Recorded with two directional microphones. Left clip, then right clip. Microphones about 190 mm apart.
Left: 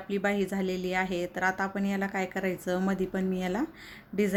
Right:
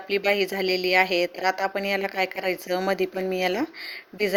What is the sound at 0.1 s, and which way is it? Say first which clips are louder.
Speech: right 7 dB; 25° right (ahead or behind).